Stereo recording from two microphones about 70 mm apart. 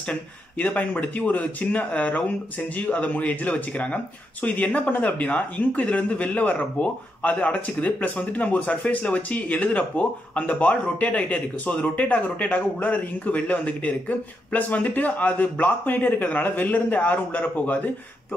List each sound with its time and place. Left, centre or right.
0.1 s speech: left